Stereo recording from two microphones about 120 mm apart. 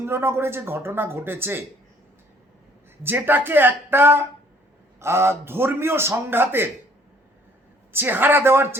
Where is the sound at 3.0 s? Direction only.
20° right (ahead or behind).